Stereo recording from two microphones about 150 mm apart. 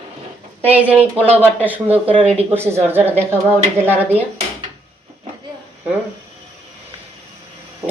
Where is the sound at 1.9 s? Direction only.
40° right (ahead or behind).